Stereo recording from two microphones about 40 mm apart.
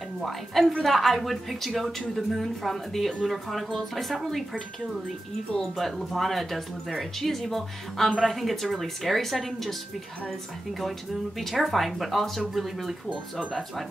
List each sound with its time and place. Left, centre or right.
0.2 s a woman's voice: centre
5.6 s a woman's voice: centre
11.3 s a woman's voice: centre
13.1 s speech: centre